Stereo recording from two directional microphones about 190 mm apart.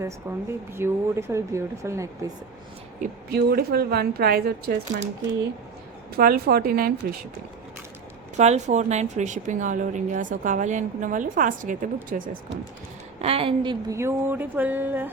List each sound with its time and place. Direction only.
0.0 s speech: 15° right (ahead or behind)
3.0 s a woman's voice: 50° right (ahead or behind)
6.1 s a woman's voice: 55° right (ahead or behind)
8.4 s a woman's voice: 35° right (ahead or behind)
13.2 s speech: 30° right (ahead or behind); by 15.1 s 10° right (ahead or behind)